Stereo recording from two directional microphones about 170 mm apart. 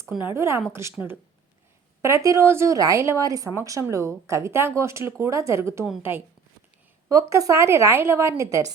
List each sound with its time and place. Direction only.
0.1 s speech: 10° right (ahead or behind)
2.0 s speech: 15° right (ahead or behind)